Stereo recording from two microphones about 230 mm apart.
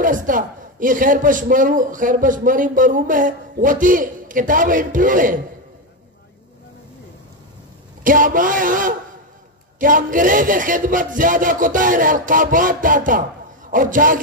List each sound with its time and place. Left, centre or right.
0.0 s a man's voice: right
8.0 s a man's voice: right